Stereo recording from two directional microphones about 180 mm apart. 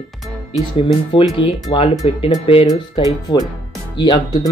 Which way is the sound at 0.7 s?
30° left (ahead or behind).